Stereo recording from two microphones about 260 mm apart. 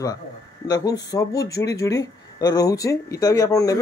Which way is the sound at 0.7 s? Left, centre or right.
Centre.